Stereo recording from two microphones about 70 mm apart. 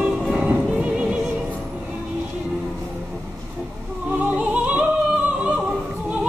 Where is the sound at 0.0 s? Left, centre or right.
Centre.